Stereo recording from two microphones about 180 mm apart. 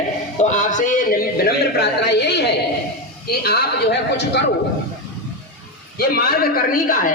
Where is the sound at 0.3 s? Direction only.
40° left (ahead or behind); by 2.5 s 70° left (ahead or behind).